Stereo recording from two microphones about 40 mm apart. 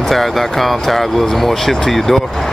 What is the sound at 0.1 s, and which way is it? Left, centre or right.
Speech, centre.